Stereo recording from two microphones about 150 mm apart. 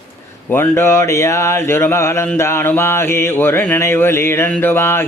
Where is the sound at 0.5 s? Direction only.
15° left (ahead or behind).